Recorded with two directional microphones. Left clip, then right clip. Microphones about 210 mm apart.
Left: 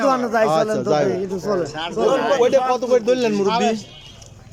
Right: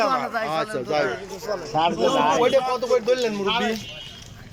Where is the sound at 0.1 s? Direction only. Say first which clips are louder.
Left 6 dB; 55° left (ahead or behind).